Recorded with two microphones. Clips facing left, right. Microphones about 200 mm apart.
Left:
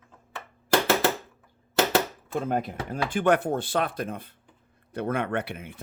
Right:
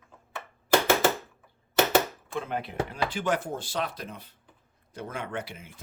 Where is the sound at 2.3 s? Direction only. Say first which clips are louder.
Left 5 dB; 45° left (ahead or behind); by 5.7 s 60° left (ahead or behind).